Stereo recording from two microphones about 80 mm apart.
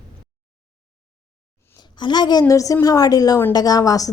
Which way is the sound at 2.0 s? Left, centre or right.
Left.